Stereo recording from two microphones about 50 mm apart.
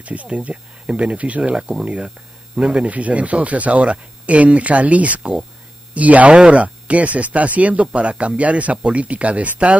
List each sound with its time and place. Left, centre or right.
0.0 s speech: right